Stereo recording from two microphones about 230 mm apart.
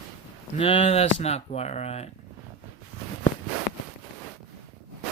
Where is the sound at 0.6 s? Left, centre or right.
Left.